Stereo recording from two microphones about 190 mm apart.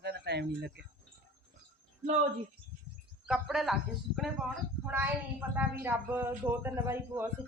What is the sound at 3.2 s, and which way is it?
A woman's voice, centre (ahead or behind).